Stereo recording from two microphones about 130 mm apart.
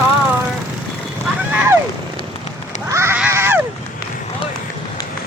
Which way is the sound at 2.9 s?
20° right (ahead or behind).